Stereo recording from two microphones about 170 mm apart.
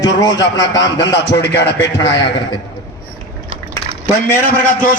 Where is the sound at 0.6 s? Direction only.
90° left.